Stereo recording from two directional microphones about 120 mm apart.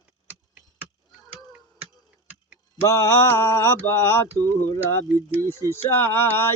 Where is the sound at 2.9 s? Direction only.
20° left (ahead or behind).